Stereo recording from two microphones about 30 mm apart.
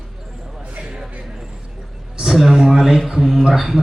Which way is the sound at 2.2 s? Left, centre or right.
Centre.